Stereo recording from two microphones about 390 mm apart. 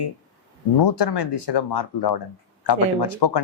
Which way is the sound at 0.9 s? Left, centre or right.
Left.